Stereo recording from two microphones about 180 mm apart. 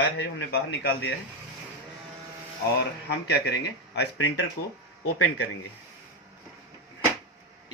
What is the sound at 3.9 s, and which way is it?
Speech, 75° left (ahead or behind).